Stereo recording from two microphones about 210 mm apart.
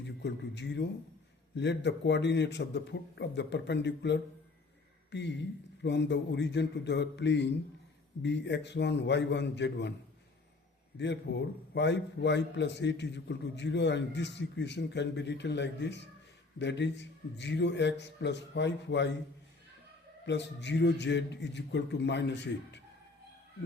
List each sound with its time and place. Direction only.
0.0 s a man's voice: 55° left (ahead or behind)
10.9 s a man's voice: 55° left (ahead or behind)
20.2 s a man's voice: 55° left (ahead or behind)